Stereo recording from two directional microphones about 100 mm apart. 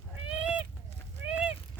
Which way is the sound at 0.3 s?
10° right (ahead or behind).